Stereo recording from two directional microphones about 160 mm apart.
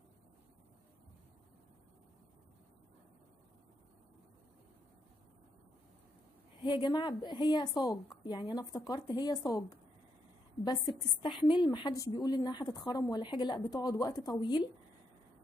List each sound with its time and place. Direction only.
6.6 s a woman's voice: 30° left (ahead or behind)